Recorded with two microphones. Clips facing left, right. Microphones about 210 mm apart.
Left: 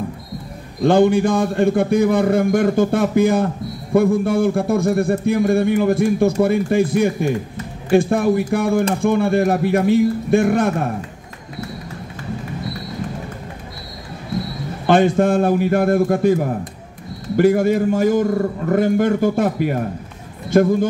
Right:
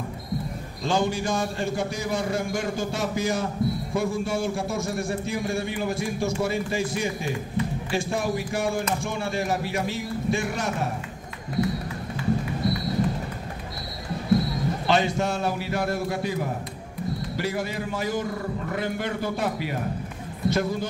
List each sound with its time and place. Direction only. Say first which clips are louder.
0.8 s a man's voice: left 11 dB; 60° left (ahead or behind)
14.9 s a man's voice: left 10 dB; 50° left (ahead or behind)